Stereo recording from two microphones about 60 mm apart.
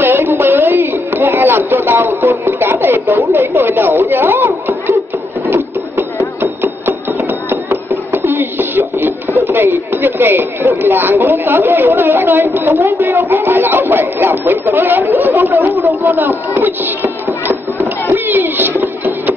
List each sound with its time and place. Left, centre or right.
0.0 s music: right
5.5 s hammer: right
12.5 s a woman's voice: right
18.1 s a sound: right